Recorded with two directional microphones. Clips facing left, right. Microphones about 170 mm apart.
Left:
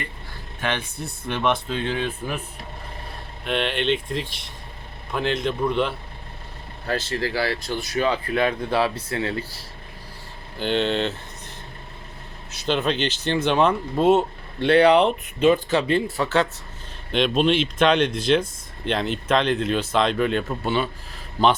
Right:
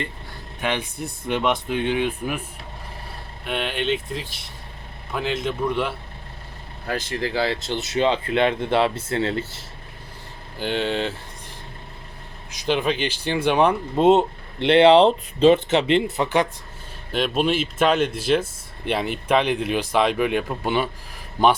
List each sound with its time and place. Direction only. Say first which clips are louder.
0.6 s speech: right 2 dB; 15° right (ahead or behind)
3.4 s speech: left 2 dB; 5° right (ahead or behind); by 9.6 s 25° right (ahead or behind)
10.6 s speech: left 1 dB; 10° right (ahead or behind)
17.1 s speech: left 2 dB; 5° right (ahead or behind)